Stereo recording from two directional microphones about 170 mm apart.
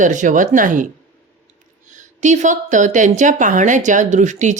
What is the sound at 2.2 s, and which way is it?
Speech, 45° right (ahead or behind).